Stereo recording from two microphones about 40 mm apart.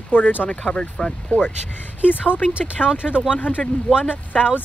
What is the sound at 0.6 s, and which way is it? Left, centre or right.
Speech, centre.